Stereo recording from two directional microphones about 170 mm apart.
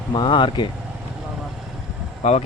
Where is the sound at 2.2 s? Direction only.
40° left (ahead or behind).